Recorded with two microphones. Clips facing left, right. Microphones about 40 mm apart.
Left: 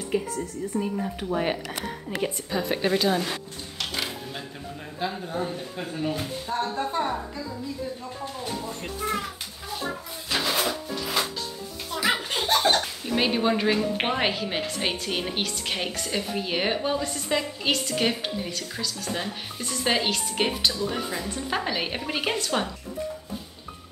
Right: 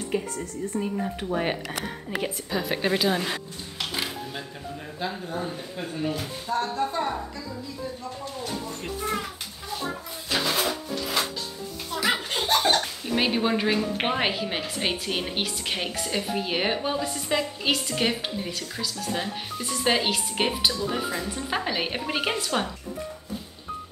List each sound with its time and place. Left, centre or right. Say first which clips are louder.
0.1 s a woman's voice: left 2 dB; centre
3.8 s music: even; centre
5.0 s a woman's voice: left 2 dB; centre
6.7 s speech: even; centre
8.8 s a sound: even; centre
14.0 s a woman's voice: even; centre